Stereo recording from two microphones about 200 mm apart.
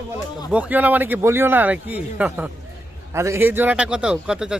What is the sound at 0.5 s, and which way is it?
A man's voice, 10° right (ahead or behind).